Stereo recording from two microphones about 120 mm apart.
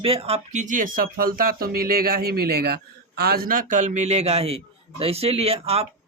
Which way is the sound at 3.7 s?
80° right.